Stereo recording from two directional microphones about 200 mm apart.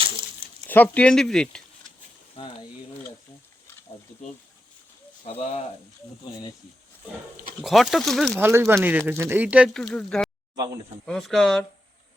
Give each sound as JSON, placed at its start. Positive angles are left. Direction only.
{"t": 0.7, "sound": "speech", "side_deg": 10}
{"t": 2.4, "sound": "a sound", "side_deg": 25}
{"t": 5.2, "sound": "speech", "side_deg": 30}
{"t": 7.6, "sound": "speech", "side_deg": 0}
{"t": 8.4, "sound": "speech", "side_deg": -10}